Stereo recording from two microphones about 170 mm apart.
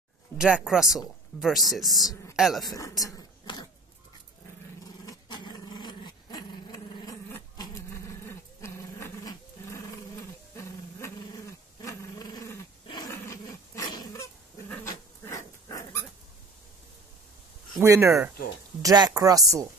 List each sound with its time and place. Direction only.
0.4 s speech: 5° right (ahead or behind)
2.6 s speech: 20° left (ahead or behind)
5.0 s dog: 25° left (ahead or behind)
17.7 s speech: 15° right (ahead or behind)